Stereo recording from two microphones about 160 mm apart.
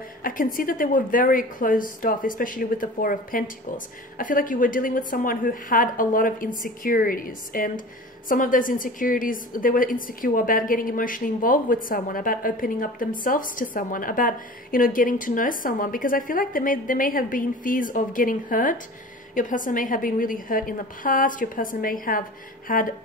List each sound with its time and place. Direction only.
0.2 s a woman's voice: 60° left (ahead or behind)